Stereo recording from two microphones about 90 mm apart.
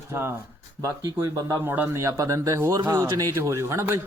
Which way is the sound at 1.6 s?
25° right (ahead or behind).